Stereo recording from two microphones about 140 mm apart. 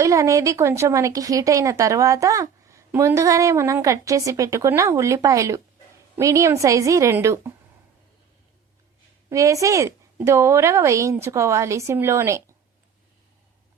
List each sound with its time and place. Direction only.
0.0 s a woman's voice: 25° right (ahead or behind)
9.3 s a woman's voice: 25° right (ahead or behind)